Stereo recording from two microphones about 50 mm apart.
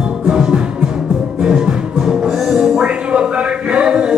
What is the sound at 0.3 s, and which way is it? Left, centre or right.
Music, centre.